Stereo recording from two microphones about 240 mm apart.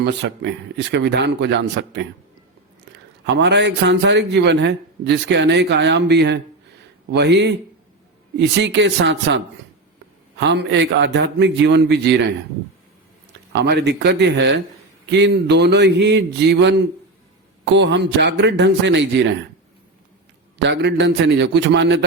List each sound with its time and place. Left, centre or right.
0.0 s a man's voice: right
3.2 s a man's voice: right
13.5 s a man's voice: right
20.6 s a man's voice: right